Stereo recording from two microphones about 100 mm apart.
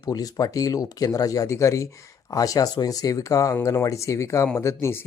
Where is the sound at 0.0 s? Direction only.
40° left (ahead or behind).